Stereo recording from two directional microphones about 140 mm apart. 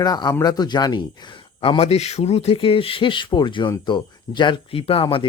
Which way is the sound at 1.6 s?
45° left (ahead or behind).